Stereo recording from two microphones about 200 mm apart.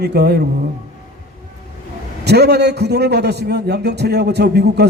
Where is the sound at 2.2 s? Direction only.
55° right (ahead or behind).